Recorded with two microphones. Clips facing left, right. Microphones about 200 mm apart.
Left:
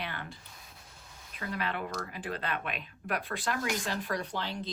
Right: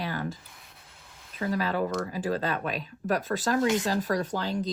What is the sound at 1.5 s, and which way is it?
Speech, 40° right (ahead or behind).